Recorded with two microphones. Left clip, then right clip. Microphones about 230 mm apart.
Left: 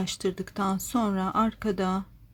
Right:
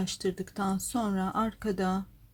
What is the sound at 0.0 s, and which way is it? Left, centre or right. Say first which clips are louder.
Speech: left 2 dB; centre.